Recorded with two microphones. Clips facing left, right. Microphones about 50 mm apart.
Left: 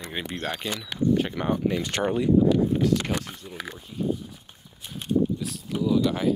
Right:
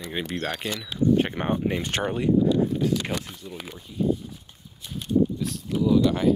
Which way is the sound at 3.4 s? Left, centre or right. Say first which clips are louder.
Right 2 dB; left.